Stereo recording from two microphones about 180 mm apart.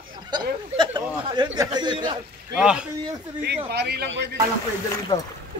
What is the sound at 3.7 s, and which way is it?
Speech, 65° right (ahead or behind).